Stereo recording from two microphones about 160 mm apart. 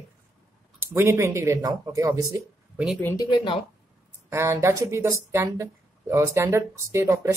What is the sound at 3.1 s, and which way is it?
Speech, 25° left (ahead or behind).